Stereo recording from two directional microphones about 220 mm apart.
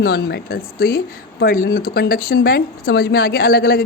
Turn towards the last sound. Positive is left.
turn(degrees=45)  # may be behind; listen again after turning